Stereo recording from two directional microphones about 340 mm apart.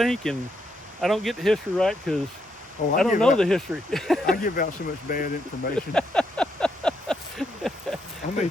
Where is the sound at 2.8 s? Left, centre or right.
Left.